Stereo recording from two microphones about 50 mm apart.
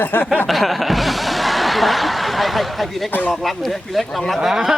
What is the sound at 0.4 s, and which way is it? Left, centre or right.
Snicker, centre.